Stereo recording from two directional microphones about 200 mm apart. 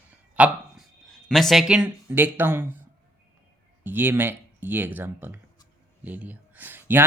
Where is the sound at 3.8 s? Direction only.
10° right (ahead or behind).